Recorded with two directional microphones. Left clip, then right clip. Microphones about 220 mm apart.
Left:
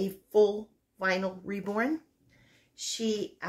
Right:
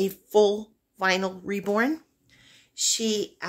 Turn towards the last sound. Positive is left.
turn(degrees=-55)  # may be behind; listen again after turning